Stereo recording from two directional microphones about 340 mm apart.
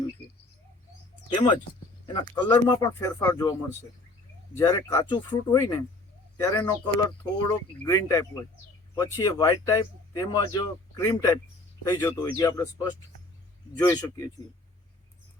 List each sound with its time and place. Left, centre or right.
2.0 s speech: centre
4.5 s speech: centre